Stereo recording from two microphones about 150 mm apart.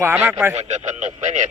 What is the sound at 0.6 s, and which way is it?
Speech, 50° right (ahead or behind).